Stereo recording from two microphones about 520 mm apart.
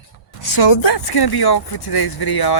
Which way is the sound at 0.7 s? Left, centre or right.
Left.